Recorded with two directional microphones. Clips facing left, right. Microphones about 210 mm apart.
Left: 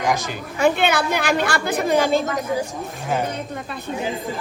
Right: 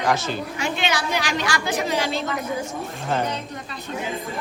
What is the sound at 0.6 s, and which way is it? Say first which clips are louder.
A woman's voice: left 9 dB; 55° left (ahead or behind).